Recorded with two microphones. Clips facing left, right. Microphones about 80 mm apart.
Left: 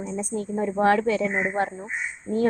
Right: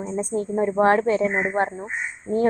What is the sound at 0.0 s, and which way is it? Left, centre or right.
Speech, right.